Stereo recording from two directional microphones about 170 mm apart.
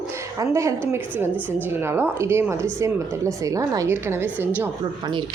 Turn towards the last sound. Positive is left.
turn(degrees=-15)  # may be behind; listen again after turning